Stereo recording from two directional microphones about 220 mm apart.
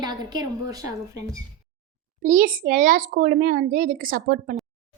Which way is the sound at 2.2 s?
40° right (ahead or behind).